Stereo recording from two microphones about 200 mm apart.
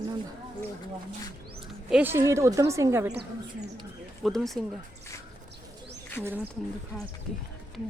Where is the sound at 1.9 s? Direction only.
10° right (ahead or behind).